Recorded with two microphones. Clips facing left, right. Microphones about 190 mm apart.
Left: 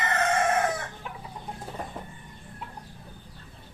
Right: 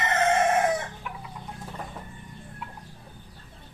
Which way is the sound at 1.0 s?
30° left (ahead or behind).